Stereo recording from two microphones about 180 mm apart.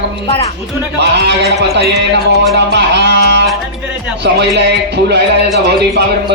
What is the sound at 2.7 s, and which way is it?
Music, 70° right (ahead or behind).